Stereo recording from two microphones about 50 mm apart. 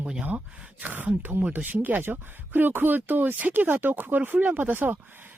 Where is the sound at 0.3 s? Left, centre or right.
Right.